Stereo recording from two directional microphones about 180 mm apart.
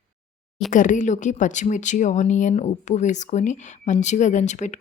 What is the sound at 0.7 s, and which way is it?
Speech, 45° left (ahead or behind).